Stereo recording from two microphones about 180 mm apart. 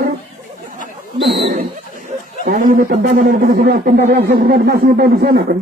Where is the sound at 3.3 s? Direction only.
55° right (ahead or behind).